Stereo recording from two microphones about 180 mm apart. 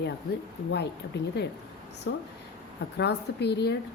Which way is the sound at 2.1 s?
80° left.